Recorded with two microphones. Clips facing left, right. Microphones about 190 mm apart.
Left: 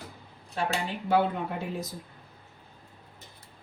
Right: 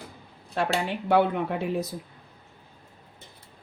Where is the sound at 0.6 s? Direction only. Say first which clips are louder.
Right 4 dB; 70° right (ahead or behind).